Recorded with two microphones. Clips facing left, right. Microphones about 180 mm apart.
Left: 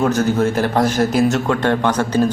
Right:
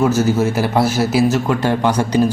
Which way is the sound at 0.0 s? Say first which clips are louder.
Right 1 dB; 5° right (ahead or behind).